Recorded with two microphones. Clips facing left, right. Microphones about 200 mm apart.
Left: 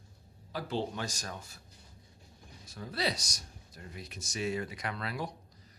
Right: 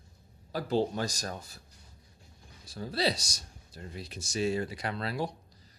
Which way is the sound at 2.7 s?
30° right (ahead or behind).